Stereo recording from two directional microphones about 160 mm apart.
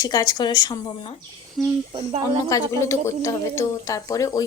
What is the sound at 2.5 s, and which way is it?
A woman's voice, 20° left (ahead or behind).